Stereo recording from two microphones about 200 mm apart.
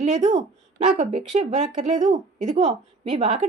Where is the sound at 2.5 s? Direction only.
25° right (ahead or behind).